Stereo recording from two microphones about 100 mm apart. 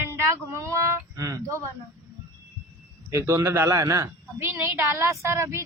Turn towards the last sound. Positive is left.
turn(degrees=-30)  # may be behind; listen again after turning